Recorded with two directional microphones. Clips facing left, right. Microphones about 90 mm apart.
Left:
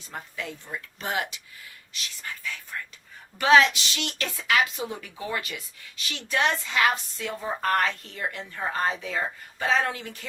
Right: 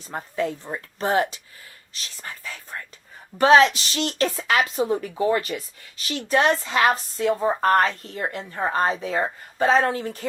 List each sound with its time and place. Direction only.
0.1 s a woman's voice: 35° right (ahead or behind)